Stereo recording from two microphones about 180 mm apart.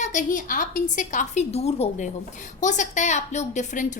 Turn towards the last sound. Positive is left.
turn(degrees=40)  # may be behind; listen again after turning